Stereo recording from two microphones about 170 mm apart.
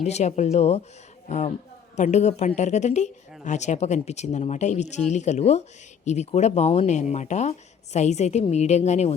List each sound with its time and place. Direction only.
0.0 s a woman's voice: 40° left (ahead or behind)